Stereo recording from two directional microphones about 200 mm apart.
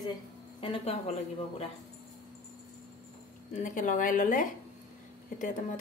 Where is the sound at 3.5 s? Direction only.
40° left (ahead or behind).